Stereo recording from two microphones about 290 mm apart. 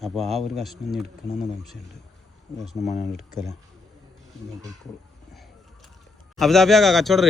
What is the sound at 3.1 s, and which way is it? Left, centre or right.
Speech, centre.